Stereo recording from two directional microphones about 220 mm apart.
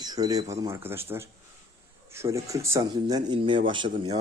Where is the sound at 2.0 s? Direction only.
10° right (ahead or behind).